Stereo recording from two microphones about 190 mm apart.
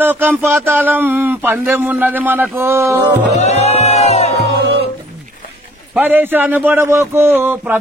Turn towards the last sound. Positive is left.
turn(degrees=-10)  # may be behind; listen again after turning